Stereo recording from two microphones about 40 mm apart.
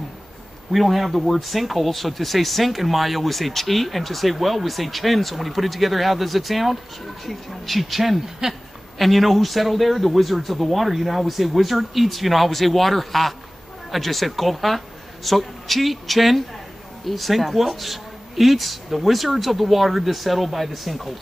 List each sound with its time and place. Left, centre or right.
0.7 s speech: centre